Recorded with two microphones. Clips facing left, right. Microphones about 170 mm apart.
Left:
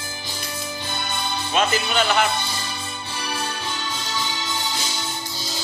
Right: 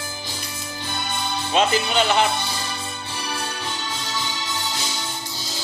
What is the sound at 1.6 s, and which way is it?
Speech, 25° right (ahead or behind).